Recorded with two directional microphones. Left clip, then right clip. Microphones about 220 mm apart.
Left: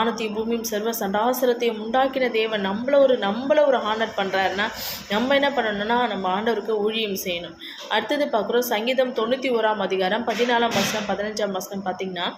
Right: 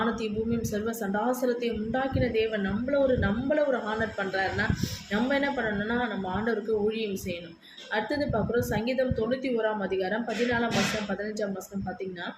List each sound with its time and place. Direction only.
0.7 s a woman's voice: 5° right (ahead or behind)